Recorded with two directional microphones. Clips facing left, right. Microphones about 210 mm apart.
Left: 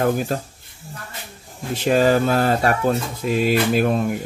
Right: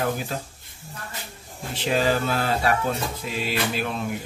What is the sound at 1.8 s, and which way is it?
Speech, 45° left (ahead or behind).